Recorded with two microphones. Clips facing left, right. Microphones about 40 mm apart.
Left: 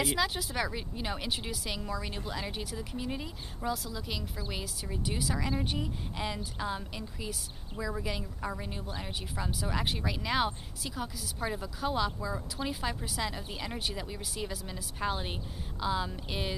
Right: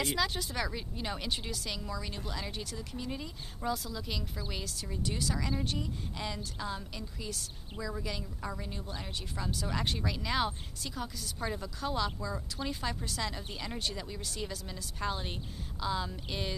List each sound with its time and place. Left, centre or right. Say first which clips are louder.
0.0 s a woman's voice: left 2 dB; centre
3.6 s a woman's voice: even; centre